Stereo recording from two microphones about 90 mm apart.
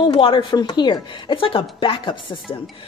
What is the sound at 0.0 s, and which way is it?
Speech, 70° left (ahead or behind).